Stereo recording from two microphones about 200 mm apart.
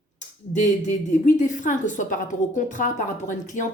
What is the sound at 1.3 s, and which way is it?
A woman's voice, 40° left (ahead or behind).